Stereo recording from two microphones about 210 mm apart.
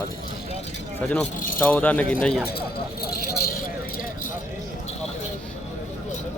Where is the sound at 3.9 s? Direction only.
40° left (ahead or behind).